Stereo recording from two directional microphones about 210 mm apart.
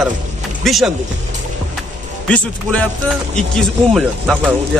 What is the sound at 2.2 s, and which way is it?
A man's voice, 5° left (ahead or behind).